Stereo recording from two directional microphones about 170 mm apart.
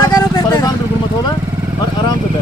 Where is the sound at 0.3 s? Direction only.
20° left (ahead or behind).